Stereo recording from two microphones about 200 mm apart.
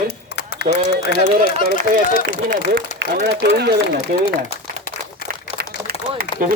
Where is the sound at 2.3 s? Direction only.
45° right (ahead or behind).